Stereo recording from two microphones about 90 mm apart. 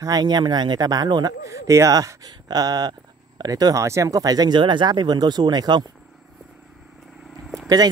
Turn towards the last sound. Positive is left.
turn(degrees=0)  # may be behind; listen again after turning